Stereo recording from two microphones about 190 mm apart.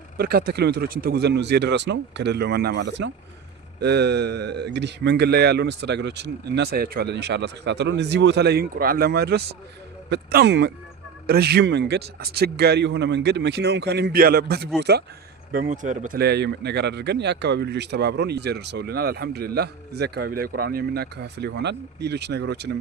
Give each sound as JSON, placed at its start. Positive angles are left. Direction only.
{"t": 0.2, "sound": "a man's voice", "side_deg": -55}
{"t": 15.7, "sound": "a man's voice", "side_deg": -40}